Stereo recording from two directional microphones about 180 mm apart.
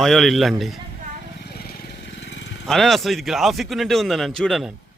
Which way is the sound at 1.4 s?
60° left (ahead or behind).